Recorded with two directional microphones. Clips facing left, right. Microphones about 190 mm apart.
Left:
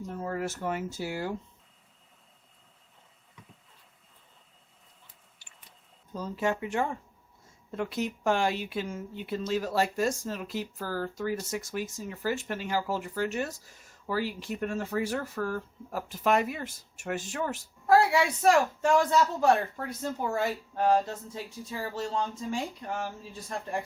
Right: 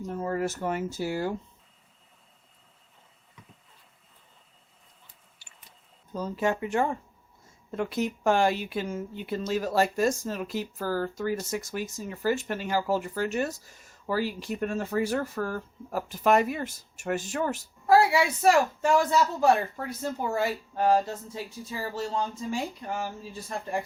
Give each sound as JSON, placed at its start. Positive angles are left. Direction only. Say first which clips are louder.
{"t": 0.2, "sound": "speech", "louder": "right 4 dB", "side_deg": -40}
{"t": 6.1, "sound": "speech", "louder": "right 2 dB", "side_deg": -45}
{"t": 17.8, "sound": "speech", "louder": "right 2 dB", "side_deg": -5}